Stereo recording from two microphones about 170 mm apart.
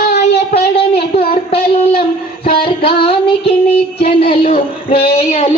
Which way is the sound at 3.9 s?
35° left (ahead or behind).